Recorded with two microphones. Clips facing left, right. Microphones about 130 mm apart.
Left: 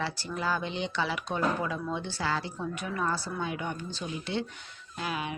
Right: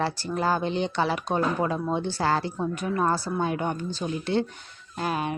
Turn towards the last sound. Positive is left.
turn(degrees=-45)  # may be behind; listen again after turning